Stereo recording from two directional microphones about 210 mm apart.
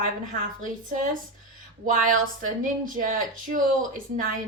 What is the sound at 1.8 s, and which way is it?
A woman's voice, 40° right (ahead or behind).